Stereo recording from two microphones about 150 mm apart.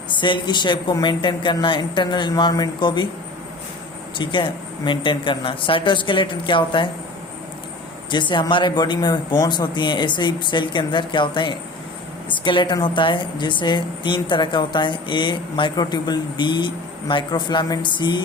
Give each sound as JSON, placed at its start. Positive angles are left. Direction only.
{"t": 0.1, "sound": "a woman's voice", "side_deg": 30}
{"t": 4.2, "sound": "a woman's voice", "side_deg": 35}
{"t": 8.1, "sound": "a woman's voice", "side_deg": 30}